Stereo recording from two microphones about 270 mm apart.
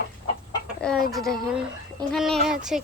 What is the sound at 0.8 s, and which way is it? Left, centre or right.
Speech, centre.